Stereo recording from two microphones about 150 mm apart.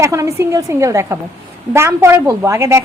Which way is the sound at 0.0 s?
20° right (ahead or behind).